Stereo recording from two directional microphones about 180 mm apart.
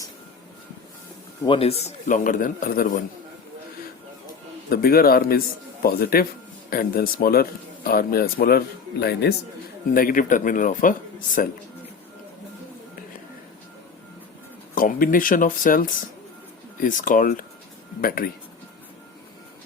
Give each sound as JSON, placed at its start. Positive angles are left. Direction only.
{"t": 1.5, "sound": "a man's voice", "side_deg": 30}
{"t": 1.8, "sound": "speech", "side_deg": 45}
{"t": 4.7, "sound": "speech", "side_deg": 55}
{"t": 9.9, "sound": "speech", "side_deg": 50}
{"t": 14.8, "sound": "speech", "side_deg": 50}
{"t": 16.8, "sound": "speech", "side_deg": 45}